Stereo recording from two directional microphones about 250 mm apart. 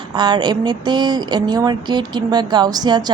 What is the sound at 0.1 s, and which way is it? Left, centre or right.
Speech, centre.